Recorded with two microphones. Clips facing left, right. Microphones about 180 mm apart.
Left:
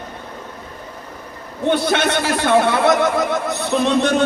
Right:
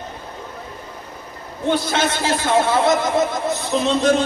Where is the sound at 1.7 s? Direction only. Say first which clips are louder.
Left 3 dB; 65° left (ahead or behind).